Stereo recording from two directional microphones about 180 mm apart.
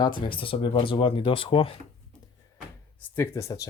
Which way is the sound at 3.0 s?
15° left (ahead or behind).